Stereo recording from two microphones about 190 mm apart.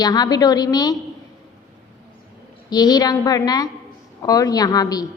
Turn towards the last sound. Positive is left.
turn(degrees=20)  # may be behind; listen again after turning